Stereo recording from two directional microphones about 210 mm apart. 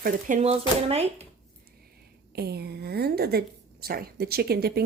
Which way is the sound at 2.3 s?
50° right (ahead or behind).